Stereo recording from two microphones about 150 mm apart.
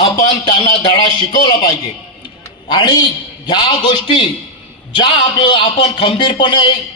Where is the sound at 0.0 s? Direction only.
30° left (ahead or behind).